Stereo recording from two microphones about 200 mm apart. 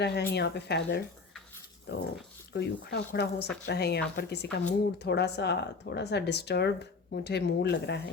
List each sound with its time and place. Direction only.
0.0 s speech: 55° left (ahead or behind)